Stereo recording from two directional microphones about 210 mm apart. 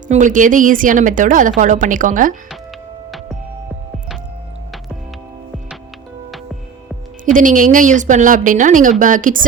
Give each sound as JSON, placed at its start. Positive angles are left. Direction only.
{"t": 0.1, "sound": "a woman's voice", "side_deg": -35}
{"t": 7.3, "sound": "a woman's voice", "side_deg": -40}